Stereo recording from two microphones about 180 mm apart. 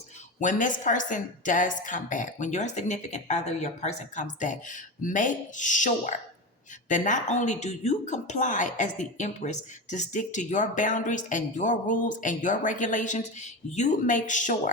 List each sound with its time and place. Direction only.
0.3 s speech: 45° left (ahead or behind)